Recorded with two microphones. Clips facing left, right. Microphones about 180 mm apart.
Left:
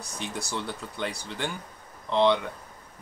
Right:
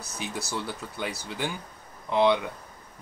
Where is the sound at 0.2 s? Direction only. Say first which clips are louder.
Even; 5° right (ahead or behind).